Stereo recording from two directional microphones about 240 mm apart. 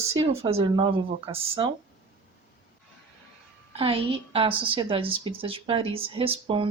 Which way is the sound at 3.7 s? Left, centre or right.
Right.